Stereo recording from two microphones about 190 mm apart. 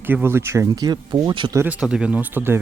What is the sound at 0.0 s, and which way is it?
Speech, 10° right (ahead or behind).